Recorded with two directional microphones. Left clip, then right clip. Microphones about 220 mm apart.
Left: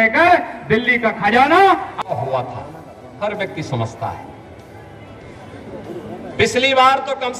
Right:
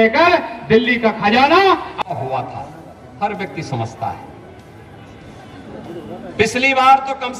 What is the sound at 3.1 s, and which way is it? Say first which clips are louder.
Speech: even; 30° left (ahead or behind).